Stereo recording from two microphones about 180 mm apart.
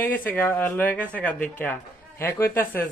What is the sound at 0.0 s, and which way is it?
A man's voice, 10° left (ahead or behind).